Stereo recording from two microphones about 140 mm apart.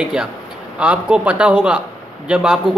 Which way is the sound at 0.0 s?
5° right (ahead or behind).